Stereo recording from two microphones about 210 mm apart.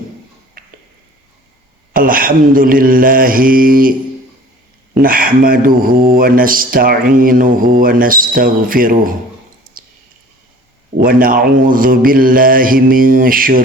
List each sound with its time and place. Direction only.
1.9 s speech: 40° right (ahead or behind)
4.9 s speech: 45° right (ahead or behind)
11.0 s speech: 40° right (ahead or behind)